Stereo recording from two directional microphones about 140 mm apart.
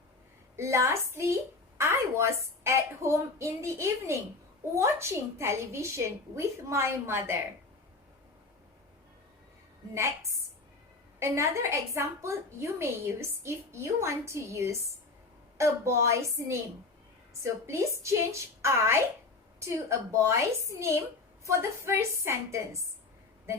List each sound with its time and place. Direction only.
0.5 s a woman's voice: 20° right (ahead or behind)
9.9 s a woman's voice: 20° right (ahead or behind)